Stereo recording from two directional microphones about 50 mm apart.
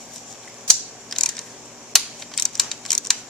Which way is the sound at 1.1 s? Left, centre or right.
Centre.